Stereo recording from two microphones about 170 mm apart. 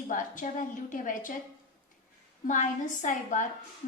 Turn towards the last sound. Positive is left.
turn(degrees=50)  # may be behind; listen again after turning